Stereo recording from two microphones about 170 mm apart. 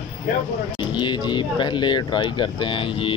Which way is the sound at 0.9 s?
25° left (ahead or behind).